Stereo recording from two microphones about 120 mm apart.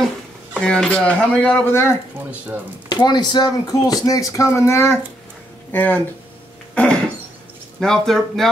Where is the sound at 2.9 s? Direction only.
35° left (ahead or behind); by 6.0 s 15° left (ahead or behind).